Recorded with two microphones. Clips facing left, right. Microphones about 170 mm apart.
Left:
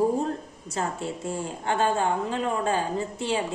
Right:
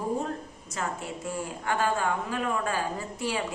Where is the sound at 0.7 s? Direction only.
30° left (ahead or behind).